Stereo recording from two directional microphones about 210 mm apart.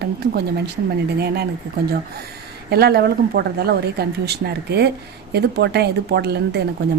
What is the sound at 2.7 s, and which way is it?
A woman's voice, 50° right (ahead or behind).